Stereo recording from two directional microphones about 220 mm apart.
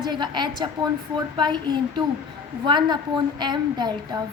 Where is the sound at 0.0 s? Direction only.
20° right (ahead or behind).